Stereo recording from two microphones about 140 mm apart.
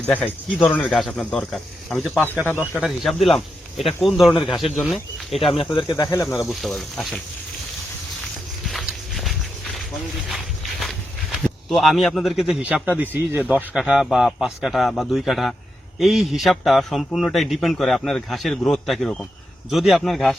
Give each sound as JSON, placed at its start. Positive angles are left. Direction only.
{"t": 0.0, "sound": "a man's voice", "side_deg": 10}
{"t": 2.0, "sound": "speech", "side_deg": -10}
{"t": 2.8, "sound": "a man's voice", "side_deg": 0}
{"t": 5.5, "sound": "speech", "side_deg": 35}
{"t": 6.5, "sound": "a man's voice", "side_deg": 0}
{"t": 8.6, "sound": "walk", "side_deg": 0}
{"t": 13.0, "sound": "a man's voice", "side_deg": -15}